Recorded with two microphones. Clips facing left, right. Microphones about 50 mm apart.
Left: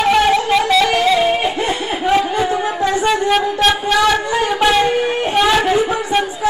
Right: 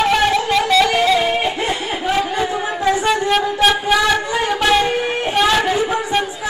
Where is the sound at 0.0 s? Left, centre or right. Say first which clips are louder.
Left 2 dB; centre.